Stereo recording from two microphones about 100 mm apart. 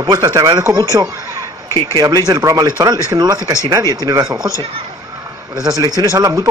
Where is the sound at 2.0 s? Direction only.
40° right (ahead or behind).